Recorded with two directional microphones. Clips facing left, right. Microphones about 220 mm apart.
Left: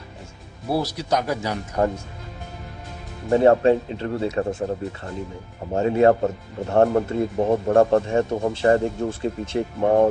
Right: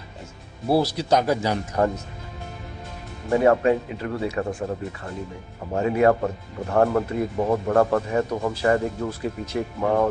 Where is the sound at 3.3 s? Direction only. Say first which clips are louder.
Left 3 dB; 30° left (ahead or behind).